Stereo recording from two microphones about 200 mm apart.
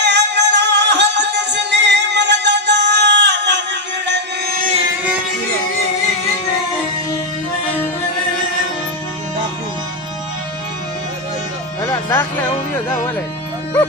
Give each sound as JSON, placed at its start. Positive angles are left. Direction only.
{"t": 0.0, "sound": "music", "side_deg": -60}
{"t": 11.8, "sound": "music", "side_deg": 15}